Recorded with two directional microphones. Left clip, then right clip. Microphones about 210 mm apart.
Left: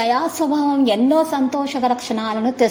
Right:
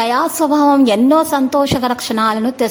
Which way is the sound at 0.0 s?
20° right (ahead or behind).